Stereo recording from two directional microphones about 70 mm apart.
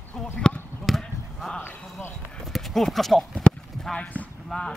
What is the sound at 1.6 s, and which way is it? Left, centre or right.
Speech, left.